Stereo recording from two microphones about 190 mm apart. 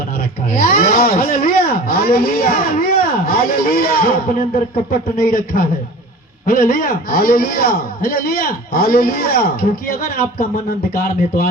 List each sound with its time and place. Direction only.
0.6 s speech: 50° left (ahead or behind)
5.2 s a man's voice: 50° left (ahead or behind)